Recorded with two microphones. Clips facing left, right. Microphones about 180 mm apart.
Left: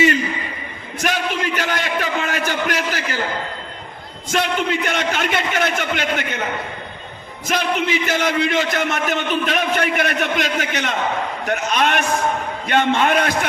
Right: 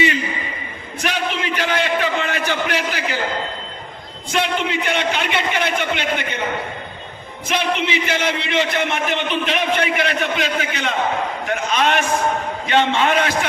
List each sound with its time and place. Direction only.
1.0 s a sound: 45° left (ahead or behind)
4.3 s a man's voice: 45° left (ahead or behind)
7.4 s a man's voice: 45° left (ahead or behind)